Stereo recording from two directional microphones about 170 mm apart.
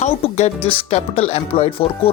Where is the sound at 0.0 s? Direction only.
40° left (ahead or behind).